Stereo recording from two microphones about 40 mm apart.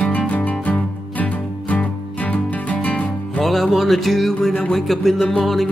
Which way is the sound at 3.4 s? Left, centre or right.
Centre.